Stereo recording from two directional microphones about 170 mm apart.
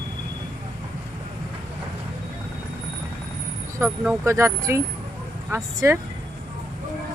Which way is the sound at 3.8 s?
15° right (ahead or behind).